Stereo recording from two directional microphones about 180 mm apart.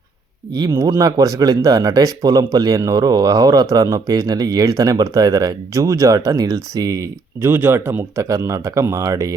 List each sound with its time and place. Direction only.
0.5 s speech: 20° right (ahead or behind)